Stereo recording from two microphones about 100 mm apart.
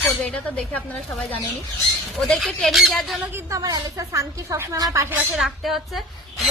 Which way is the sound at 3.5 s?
35° right (ahead or behind).